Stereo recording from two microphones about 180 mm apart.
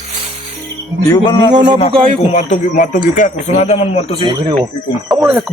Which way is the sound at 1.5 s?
25° right (ahead or behind).